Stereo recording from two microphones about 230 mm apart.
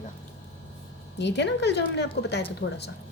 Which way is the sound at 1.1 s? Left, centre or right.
Left.